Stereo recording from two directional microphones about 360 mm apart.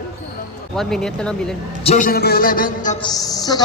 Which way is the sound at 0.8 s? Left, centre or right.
Centre.